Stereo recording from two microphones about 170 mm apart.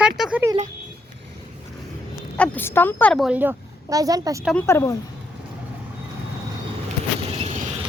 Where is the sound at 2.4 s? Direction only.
10° left (ahead or behind).